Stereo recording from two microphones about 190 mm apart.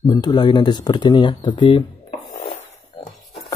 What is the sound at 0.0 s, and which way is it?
Speech, 20° left (ahead or behind).